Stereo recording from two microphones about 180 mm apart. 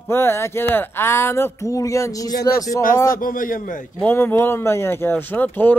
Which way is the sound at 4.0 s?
10° left (ahead or behind).